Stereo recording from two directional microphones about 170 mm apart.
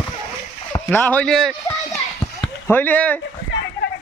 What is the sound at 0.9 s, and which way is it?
Speech, 10° left (ahead or behind).